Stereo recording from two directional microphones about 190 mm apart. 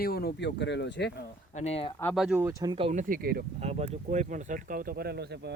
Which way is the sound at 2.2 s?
5° right (ahead or behind).